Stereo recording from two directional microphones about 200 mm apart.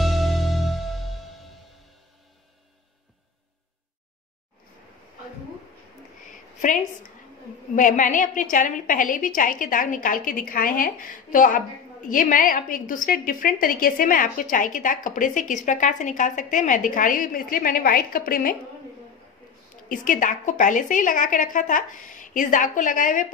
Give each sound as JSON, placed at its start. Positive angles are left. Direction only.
{"t": 0.0, "sound": "music", "side_deg": 0}
{"t": 6.6, "sound": "a woman's voice", "side_deg": 40}
{"t": 19.9, "sound": "a woman's voice", "side_deg": 40}